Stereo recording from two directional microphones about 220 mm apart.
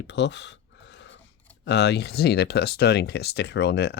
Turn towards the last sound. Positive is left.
turn(degrees=50)  # may be behind; listen again after turning